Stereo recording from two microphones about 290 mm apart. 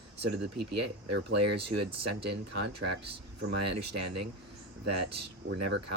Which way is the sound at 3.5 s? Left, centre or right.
Right.